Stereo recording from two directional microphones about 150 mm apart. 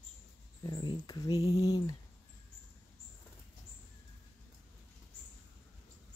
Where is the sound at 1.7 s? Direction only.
25° left (ahead or behind).